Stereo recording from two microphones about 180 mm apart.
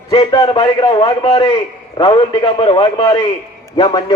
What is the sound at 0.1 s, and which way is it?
A man's voice, 25° left (ahead or behind).